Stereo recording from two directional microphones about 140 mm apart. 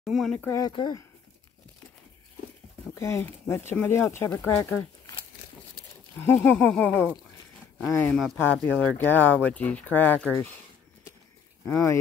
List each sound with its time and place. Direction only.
0.0 s speech: centre (ahead or behind)
0.6 s speech: 30° left (ahead or behind)
2.9 s speech: 20° left (ahead or behind)
6.2 s speech: 10° left (ahead or behind)
11.6 s speech: 20° left (ahead or behind)